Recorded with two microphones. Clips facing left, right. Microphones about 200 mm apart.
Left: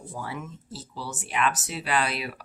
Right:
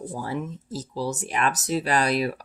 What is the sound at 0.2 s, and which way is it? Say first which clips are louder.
Speech: right 4 dB; 35° right (ahead or behind).